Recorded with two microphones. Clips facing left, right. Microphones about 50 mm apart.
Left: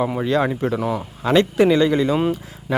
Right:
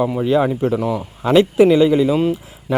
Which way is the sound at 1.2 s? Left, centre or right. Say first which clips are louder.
Right 4 dB; centre.